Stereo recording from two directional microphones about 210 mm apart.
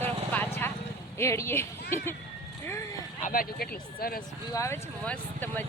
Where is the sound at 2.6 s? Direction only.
15° left (ahead or behind).